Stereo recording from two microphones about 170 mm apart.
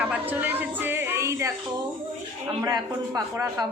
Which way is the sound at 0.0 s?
10° right (ahead or behind).